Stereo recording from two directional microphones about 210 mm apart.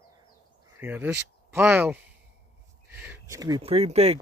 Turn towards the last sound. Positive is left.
turn(degrees=-30)  # may be behind; listen again after turning